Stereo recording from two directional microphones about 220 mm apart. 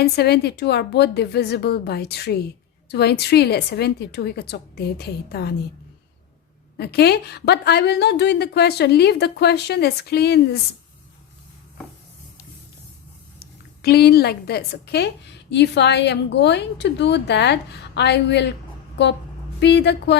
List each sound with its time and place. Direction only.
0.0 s a woman's voice: 50° left (ahead or behind)
6.7 s a woman's voice: 45° left (ahead or behind)
13.4 s a woman's voice: 45° left (ahead or behind)
19.5 s a woman's voice: 50° left (ahead or behind)